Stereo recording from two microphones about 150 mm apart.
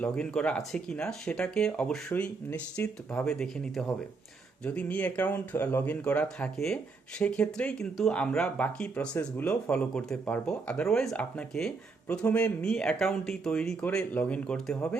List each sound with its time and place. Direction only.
0.0 s speech: 5° left (ahead or behind)